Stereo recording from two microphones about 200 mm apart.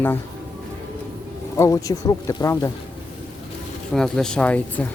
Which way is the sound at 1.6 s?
15° left (ahead or behind).